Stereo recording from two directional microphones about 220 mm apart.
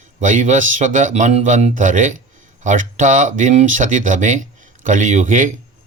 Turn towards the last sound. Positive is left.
turn(degrees=-35)  # may be behind; listen again after turning